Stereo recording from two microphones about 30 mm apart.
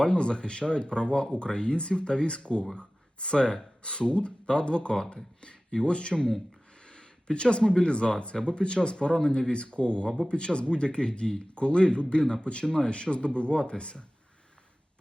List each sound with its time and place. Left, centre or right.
0.0 s speech: left
6.1 s speech: centre
6.8 s speech: left